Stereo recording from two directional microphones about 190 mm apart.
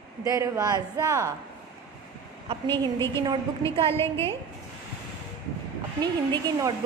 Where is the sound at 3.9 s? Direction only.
15° left (ahead or behind).